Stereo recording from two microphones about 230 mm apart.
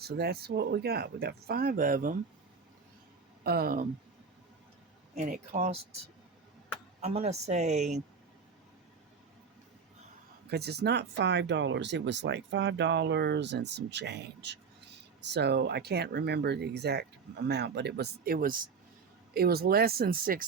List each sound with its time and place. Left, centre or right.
0.0 s speech: right
3.4 s speech: right
5.1 s speech: right
5.5 s speech: right
7.0 s speech: right
10.5 s speech: right